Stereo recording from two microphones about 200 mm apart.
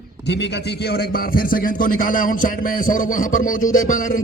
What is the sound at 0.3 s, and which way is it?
A man's voice, 60° left (ahead or behind).